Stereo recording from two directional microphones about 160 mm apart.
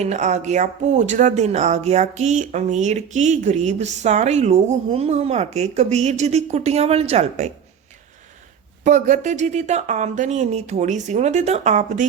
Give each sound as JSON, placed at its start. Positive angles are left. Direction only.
{"t": 0.0, "sound": "speech", "side_deg": -45}
{"t": 8.8, "sound": "speech", "side_deg": -50}